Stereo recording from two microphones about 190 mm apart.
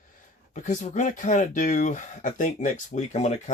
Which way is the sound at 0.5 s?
40° left (ahead or behind).